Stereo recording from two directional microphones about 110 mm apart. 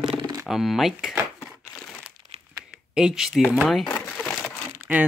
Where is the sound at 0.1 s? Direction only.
45° right (ahead or behind).